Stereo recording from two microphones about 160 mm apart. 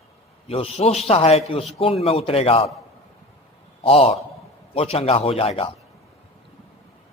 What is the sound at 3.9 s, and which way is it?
A man's voice, 40° left (ahead or behind).